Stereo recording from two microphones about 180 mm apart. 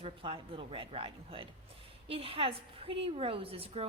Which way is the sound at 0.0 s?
30° right (ahead or behind).